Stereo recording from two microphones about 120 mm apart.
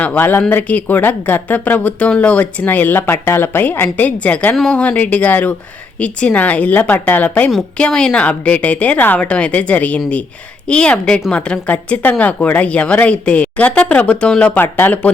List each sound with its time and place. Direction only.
0.0 s speech: 15° left (ahead or behind)
14.6 s speech: 20° left (ahead or behind)